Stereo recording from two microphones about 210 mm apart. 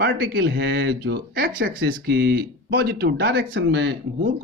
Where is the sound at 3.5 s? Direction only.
60° right (ahead or behind).